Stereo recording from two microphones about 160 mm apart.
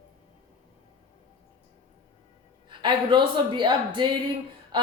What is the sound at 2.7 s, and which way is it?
Speech, 30° right (ahead or behind).